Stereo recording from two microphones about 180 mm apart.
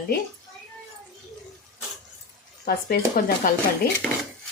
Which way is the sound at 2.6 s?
60° left (ahead or behind).